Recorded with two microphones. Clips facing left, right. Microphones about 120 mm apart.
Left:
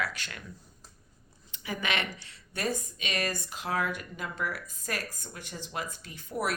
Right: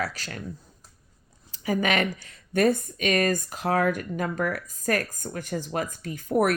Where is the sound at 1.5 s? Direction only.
40° right (ahead or behind).